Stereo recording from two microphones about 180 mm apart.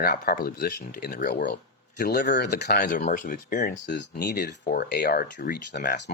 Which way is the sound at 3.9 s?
65° left (ahead or behind).